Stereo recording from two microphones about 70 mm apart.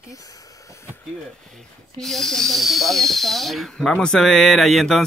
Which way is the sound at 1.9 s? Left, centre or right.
Centre.